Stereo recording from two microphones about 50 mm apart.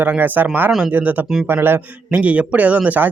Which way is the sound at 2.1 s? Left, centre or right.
Right.